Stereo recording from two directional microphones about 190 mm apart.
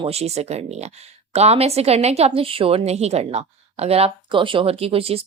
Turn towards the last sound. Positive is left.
turn(degrees=-30)  # may be behind; listen again after turning